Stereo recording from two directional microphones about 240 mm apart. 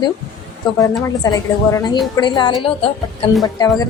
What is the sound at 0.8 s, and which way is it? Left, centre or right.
A woman's voice, centre.